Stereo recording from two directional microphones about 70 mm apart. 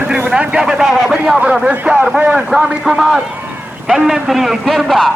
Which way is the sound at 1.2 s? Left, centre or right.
Centre.